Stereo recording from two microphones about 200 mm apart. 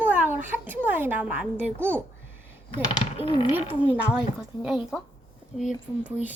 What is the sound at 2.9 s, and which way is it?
Speech, 25° left (ahead or behind).